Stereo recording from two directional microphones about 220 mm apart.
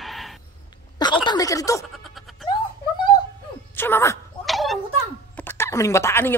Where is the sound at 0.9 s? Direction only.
20° left (ahead or behind).